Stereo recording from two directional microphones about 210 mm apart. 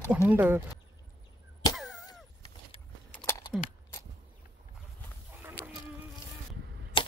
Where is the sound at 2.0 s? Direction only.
15° left (ahead or behind).